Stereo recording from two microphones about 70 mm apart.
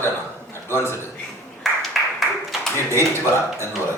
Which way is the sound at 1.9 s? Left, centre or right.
Centre.